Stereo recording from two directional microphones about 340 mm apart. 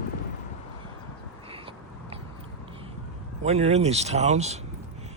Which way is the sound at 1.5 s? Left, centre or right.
Centre.